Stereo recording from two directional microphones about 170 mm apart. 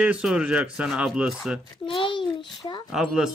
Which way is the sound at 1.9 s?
30° left (ahead or behind).